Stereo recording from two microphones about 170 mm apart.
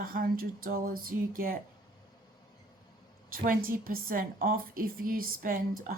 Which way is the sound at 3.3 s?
55° right (ahead or behind).